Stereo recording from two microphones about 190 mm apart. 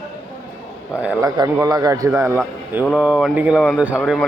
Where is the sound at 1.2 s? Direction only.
20° right (ahead or behind).